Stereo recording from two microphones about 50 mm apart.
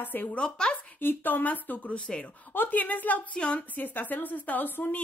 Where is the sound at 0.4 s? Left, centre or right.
Centre.